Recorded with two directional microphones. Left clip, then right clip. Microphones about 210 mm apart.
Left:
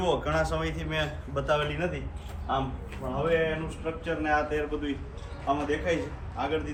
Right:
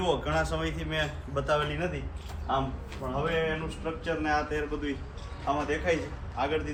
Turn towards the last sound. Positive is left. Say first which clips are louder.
# even
turn(degrees=-15)  # may be behind; listen again after turning